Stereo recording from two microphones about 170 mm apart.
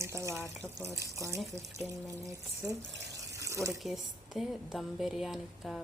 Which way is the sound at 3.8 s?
Centre (ahead or behind).